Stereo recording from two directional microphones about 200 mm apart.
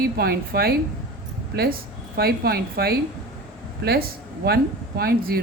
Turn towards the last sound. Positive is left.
turn(degrees=-50)  # may be behind; listen again after turning